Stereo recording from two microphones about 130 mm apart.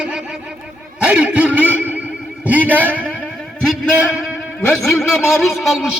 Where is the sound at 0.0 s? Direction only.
5° right (ahead or behind).